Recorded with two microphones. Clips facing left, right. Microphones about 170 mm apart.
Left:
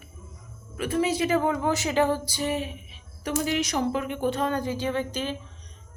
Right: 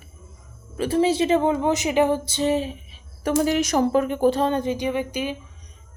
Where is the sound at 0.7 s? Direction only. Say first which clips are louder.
Right 5 dB; 30° right (ahead or behind).